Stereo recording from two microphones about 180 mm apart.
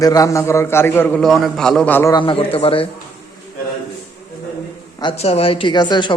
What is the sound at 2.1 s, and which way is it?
Speech, 30° left (ahead or behind).